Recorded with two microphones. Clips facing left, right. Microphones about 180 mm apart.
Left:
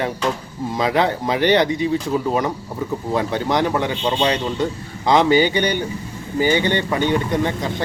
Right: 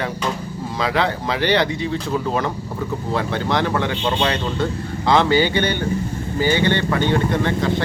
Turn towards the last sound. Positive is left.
turn(degrees=15)  # may be behind; listen again after turning